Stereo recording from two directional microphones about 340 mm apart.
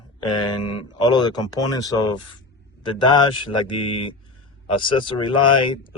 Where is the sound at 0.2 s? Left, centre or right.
Centre.